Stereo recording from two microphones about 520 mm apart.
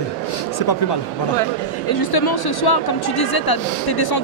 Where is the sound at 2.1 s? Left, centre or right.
Left.